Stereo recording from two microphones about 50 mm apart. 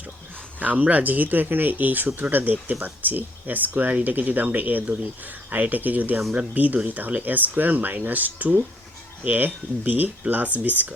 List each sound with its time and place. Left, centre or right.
0.6 s speech: right